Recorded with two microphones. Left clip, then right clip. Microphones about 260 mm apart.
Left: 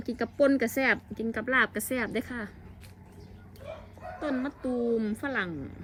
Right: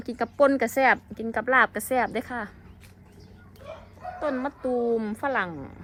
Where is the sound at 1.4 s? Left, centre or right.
Centre.